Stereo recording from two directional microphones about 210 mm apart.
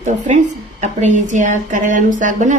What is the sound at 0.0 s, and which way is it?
A woman's voice, 35° right (ahead or behind).